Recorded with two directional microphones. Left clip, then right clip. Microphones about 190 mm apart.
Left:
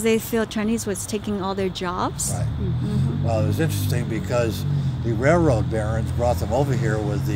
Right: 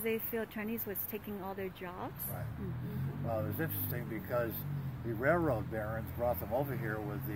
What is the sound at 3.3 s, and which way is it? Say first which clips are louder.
Speech: left 12 dB; 15° left (ahead or behind).